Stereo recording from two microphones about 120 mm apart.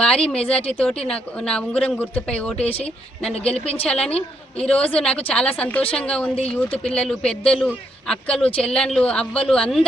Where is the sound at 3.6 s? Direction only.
55° left (ahead or behind).